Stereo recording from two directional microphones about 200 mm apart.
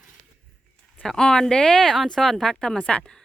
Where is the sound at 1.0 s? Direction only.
5° left (ahead or behind).